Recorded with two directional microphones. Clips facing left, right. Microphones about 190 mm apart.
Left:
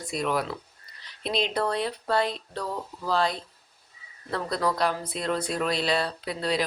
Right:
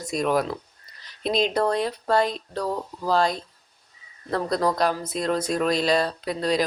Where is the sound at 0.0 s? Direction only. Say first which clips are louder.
Right 5 dB; 45° right (ahead or behind).